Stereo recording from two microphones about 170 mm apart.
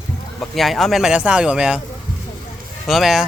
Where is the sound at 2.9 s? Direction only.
Centre (ahead or behind).